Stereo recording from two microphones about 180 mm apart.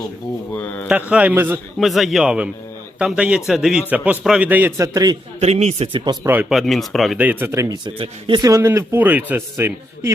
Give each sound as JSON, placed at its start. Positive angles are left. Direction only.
{"t": 0.5, "sound": "speech", "side_deg": 10}
{"t": 1.1, "sound": "speech", "side_deg": -10}
{"t": 1.8, "sound": "speech", "side_deg": 0}
{"t": 5.4, "sound": "a man's voice", "side_deg": -35}
{"t": 6.1, "sound": "speech", "side_deg": -10}